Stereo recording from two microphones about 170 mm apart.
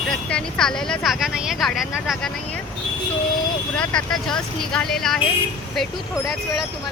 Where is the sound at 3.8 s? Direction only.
5° left (ahead or behind).